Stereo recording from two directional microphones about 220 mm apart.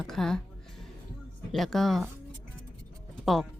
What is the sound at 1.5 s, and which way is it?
Speech, centre (ahead or behind).